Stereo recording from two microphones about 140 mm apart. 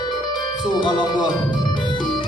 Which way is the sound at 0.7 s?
30° left (ahead or behind).